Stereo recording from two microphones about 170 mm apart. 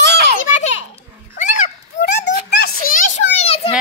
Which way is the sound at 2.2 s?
70° left (ahead or behind).